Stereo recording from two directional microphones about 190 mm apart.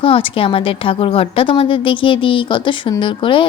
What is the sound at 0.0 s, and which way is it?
A woman's voice, 30° left (ahead or behind).